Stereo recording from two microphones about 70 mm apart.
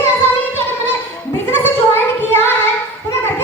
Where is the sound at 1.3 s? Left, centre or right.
Left.